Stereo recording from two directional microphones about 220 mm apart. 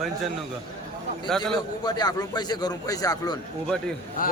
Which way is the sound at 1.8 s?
20° left (ahead or behind).